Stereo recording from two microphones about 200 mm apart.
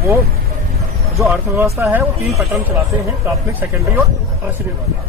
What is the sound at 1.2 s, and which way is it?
Speech, 10° right (ahead or behind).